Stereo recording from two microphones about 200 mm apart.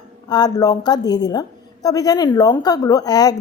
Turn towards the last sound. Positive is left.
turn(degrees=20)  # may be behind; listen again after turning